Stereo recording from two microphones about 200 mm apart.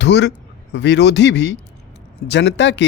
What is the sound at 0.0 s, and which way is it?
A man's voice, 60° left (ahead or behind).